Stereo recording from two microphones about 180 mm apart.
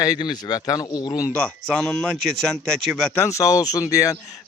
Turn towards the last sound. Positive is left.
turn(degrees=20)  # may be behind; listen again after turning